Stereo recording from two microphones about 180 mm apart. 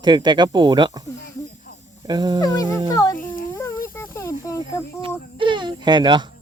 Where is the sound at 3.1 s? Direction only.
50° left (ahead or behind).